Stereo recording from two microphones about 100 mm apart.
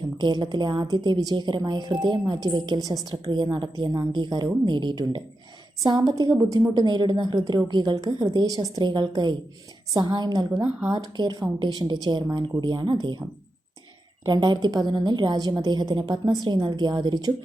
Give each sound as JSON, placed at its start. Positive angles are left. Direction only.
{"t": 0.2, "sound": "speech", "side_deg": -45}
{"t": 10.6, "sound": "speech", "side_deg": -15}
{"t": 10.9, "sound": "speech", "side_deg": -45}
{"t": 14.3, "sound": "speech", "side_deg": -50}